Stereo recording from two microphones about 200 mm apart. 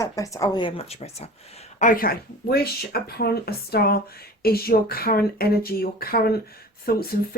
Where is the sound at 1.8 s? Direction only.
45° left (ahead or behind).